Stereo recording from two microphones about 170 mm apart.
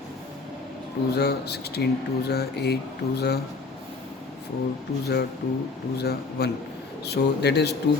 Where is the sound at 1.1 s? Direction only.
70° left (ahead or behind).